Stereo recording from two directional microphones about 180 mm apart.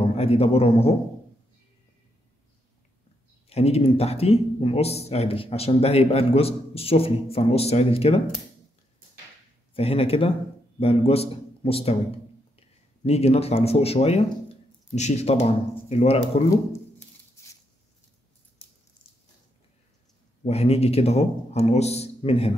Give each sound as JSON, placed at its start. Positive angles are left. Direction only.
{"t": 0.1, "sound": "speech", "side_deg": 35}
{"t": 3.4, "sound": "speech", "side_deg": 35}
{"t": 9.8, "sound": "a man's voice", "side_deg": 35}
{"t": 17.4, "sound": "a sound", "side_deg": 15}
{"t": 20.4, "sound": "speech", "side_deg": 35}